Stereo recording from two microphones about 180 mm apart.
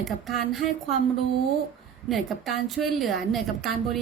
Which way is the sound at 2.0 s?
Centre (ahead or behind).